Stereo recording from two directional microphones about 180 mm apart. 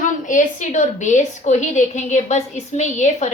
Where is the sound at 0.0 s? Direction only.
45° left (ahead or behind).